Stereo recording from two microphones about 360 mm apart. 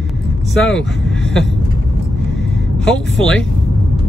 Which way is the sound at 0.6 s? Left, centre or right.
Centre.